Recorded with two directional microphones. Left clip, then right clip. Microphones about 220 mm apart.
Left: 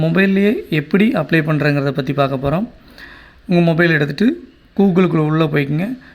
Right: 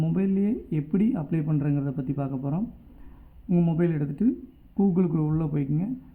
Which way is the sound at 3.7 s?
25° left (ahead or behind).